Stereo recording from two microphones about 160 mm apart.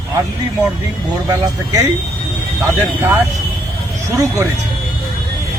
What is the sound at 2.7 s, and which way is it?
Speech, 10° right (ahead or behind).